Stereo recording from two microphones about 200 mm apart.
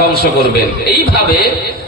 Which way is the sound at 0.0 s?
50° left (ahead or behind).